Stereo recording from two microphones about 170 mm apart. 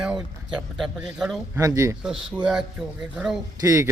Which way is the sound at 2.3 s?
5° right (ahead or behind).